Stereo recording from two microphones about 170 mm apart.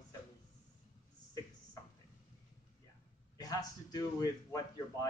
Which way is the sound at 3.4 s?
20° left (ahead or behind).